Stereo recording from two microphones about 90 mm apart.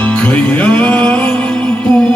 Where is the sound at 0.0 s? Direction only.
15° left (ahead or behind).